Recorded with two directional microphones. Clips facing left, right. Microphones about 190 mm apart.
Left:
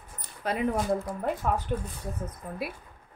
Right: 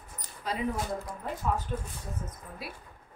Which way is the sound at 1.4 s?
65° left (ahead or behind).